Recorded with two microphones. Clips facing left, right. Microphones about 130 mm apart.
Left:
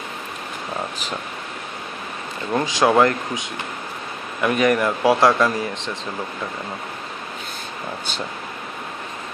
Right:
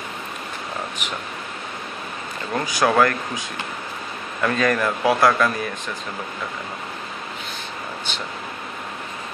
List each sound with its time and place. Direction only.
2.5 s speech: 20° left (ahead or behind)